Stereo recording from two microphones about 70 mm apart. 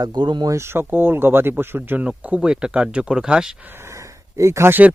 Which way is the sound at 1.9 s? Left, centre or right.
Right.